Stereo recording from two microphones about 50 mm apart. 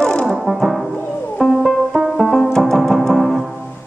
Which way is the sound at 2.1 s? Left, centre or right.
Centre.